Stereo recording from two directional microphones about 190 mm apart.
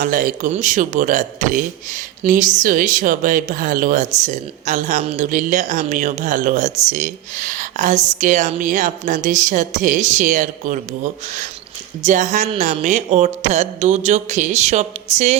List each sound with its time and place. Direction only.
0.0 s a man's voice: 45° right (ahead or behind)